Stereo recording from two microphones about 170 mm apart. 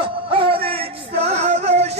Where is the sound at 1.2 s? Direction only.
40° right (ahead or behind).